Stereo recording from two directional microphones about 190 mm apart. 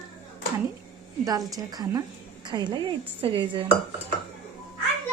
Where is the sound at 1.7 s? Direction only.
20° right (ahead or behind).